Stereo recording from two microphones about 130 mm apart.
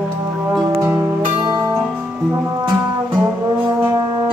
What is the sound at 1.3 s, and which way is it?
Music, 30° right (ahead or behind).